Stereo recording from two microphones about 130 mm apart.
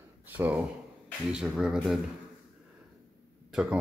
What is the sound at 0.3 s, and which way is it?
Speech, 10° right (ahead or behind).